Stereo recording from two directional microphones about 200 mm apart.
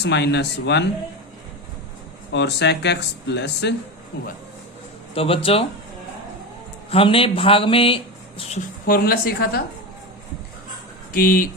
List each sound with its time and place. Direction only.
0.0 s speech: 60° left (ahead or behind)
2.3 s speech: 60° left (ahead or behind)
5.1 s speech: 30° left (ahead or behind)
6.9 s speech: 25° left (ahead or behind)
8.9 s speech: 50° left (ahead or behind)
11.1 s speech: 45° left (ahead or behind)